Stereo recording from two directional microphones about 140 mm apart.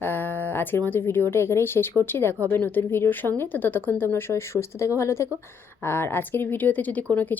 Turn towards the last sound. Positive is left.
turn(degrees=10)  # may be behind; listen again after turning